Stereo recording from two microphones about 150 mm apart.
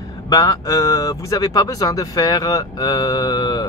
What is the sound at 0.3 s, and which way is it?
Speech, 25° left (ahead or behind).